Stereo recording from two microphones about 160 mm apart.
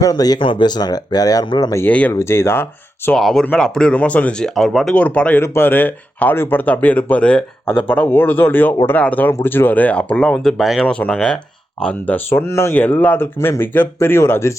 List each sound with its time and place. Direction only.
0.0 s speech: 25° left (ahead or behind)
1.8 s speech: 10° left (ahead or behind)
3.1 s speech: centre (ahead or behind)